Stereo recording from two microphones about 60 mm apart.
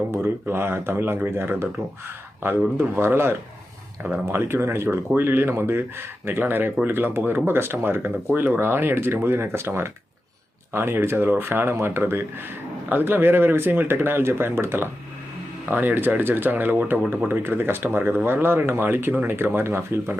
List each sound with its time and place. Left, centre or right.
0.1 s speech: right
15.7 s speech: right